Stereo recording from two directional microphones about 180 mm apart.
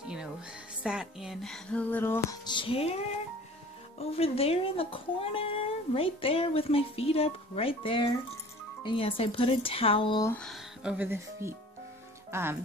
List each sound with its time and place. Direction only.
0.8 s speech: 5° right (ahead or behind)
2.4 s speech: 25° left (ahead or behind)
4.0 s speech: 35° left (ahead or behind)
10.2 s speech: 5° left (ahead or behind); by 12.5 s 15° right (ahead or behind)